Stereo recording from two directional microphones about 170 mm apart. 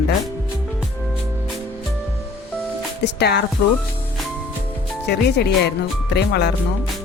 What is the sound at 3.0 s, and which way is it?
Speech, 80° left.